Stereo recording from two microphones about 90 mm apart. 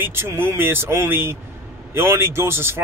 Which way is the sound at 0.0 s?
25° right (ahead or behind).